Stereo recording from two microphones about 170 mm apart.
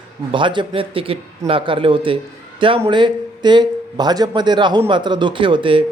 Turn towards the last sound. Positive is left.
turn(degrees=-30)  # may be behind; listen again after turning